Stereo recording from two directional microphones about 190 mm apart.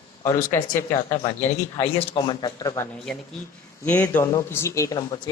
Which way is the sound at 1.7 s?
30° left (ahead or behind).